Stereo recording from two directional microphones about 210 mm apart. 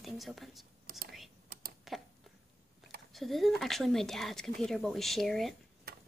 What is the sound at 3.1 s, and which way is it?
Speech, centre (ahead or behind).